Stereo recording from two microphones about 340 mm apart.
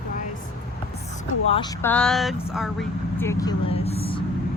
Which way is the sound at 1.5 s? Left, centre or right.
Centre.